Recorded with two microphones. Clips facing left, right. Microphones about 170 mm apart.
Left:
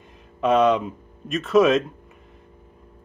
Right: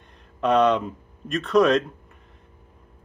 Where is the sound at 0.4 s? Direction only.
Centre (ahead or behind).